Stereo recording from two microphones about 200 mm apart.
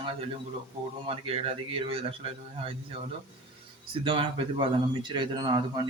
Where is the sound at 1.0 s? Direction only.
25° right (ahead or behind).